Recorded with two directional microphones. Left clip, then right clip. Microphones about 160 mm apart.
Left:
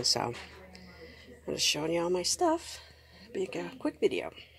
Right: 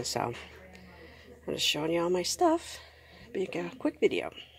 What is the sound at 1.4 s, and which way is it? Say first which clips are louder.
Speech: right 1 dB; 5° right (ahead or behind).